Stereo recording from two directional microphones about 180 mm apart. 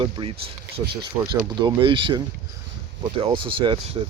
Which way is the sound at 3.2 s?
30° right (ahead or behind).